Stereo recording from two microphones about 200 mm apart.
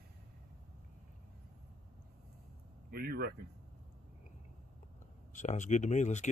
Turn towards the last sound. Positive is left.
turn(degrees=35)  # may be behind; listen again after turning